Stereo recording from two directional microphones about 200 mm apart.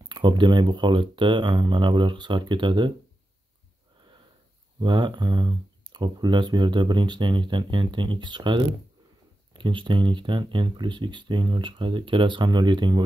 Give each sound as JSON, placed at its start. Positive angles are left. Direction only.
{"t": 0.1, "sound": "speech", "side_deg": -20}
{"t": 4.7, "sound": "speech", "side_deg": -25}